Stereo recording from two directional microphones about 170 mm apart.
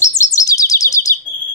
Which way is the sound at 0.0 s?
20° left (ahead or behind).